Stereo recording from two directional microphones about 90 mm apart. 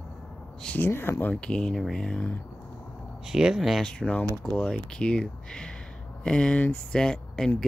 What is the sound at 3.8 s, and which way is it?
Speech, 10° left (ahead or behind).